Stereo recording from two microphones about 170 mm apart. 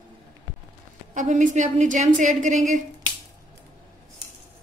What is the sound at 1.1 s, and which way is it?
A woman's voice, 45° right (ahead or behind).